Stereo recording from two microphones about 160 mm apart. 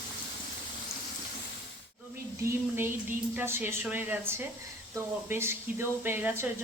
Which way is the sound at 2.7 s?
15° right (ahead or behind).